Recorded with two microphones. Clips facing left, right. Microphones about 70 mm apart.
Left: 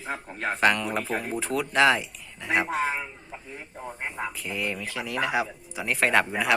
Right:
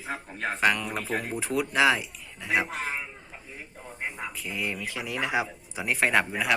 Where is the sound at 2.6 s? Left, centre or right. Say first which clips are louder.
Left 6 dB; left.